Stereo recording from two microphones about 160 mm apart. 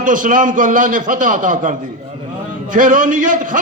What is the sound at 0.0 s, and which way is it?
A man's voice, 55° right (ahead or behind).